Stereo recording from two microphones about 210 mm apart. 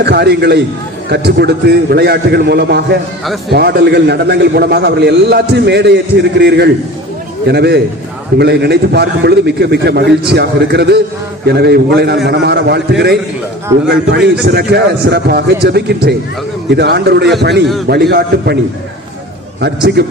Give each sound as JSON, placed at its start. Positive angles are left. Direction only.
{"t": 0.0, "sound": "a man's voice", "side_deg": -50}
{"t": 19.6, "sound": "a man's voice", "side_deg": -50}